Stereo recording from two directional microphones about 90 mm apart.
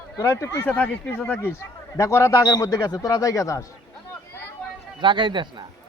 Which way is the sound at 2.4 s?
45° left (ahead or behind).